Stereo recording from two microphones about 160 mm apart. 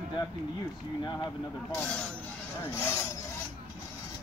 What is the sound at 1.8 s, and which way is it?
Speech, 5° left (ahead or behind).